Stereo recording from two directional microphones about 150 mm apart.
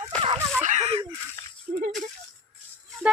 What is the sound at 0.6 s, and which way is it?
Speech, 50° right (ahead or behind).